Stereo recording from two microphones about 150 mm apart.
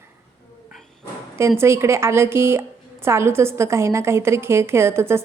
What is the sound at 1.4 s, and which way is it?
A woman's voice, 15° right (ahead or behind).